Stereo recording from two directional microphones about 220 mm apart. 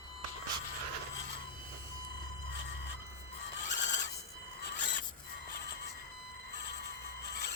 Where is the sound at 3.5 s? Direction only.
30° left (ahead or behind).